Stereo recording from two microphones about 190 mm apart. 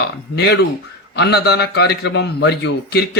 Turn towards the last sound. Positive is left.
turn(degrees=60)  # may be behind; listen again after turning